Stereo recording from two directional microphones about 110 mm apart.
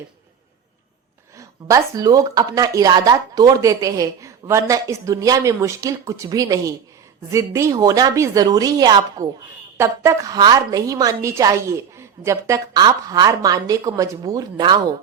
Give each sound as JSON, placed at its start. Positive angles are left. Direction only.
{"t": 1.4, "sound": "speech", "side_deg": -30}
{"t": 9.7, "sound": "a woman's voice", "side_deg": -25}